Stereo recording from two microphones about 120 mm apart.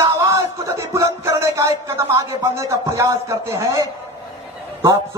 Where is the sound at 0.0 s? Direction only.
25° right (ahead or behind).